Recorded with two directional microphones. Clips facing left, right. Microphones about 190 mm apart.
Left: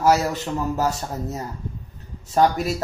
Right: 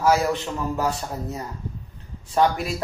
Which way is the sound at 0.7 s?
40° left (ahead or behind).